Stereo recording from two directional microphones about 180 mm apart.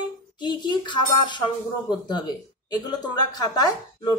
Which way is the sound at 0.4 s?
25° left (ahead or behind).